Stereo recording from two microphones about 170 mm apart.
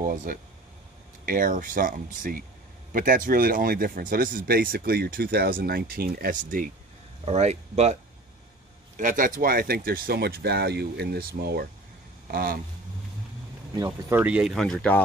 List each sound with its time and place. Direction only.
0.0 s speech: 55° right (ahead or behind)
7.2 s speech: 40° right (ahead or behind)
8.9 s speech: 50° right (ahead or behind)
13.7 s speech: 20° right (ahead or behind); by 15.0 s 5° left (ahead or behind)